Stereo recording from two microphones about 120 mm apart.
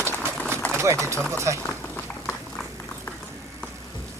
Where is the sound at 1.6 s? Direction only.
15° left (ahead or behind).